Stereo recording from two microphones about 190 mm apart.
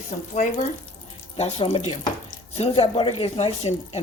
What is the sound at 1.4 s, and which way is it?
A woman's voice, 35° left (ahead or behind).